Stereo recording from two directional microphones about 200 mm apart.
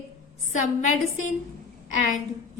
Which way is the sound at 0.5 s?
40° left (ahead or behind).